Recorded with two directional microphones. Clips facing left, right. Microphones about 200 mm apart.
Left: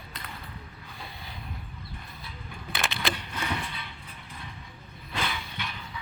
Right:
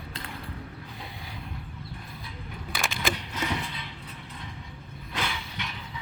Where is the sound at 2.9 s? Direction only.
20° right (ahead or behind).